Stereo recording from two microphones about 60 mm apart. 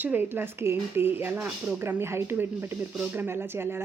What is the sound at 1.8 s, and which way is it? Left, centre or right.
Speech, right.